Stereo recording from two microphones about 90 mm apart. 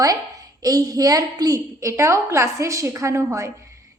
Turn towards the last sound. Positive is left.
turn(degrees=-30)  # may be behind; listen again after turning